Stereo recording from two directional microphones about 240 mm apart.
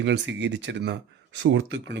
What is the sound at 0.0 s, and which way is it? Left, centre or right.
Speech, right.